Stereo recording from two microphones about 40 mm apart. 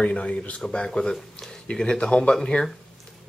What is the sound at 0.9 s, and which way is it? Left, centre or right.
Speech, centre.